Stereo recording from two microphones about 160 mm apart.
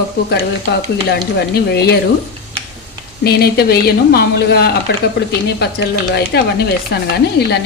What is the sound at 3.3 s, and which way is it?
Speech, 80° left.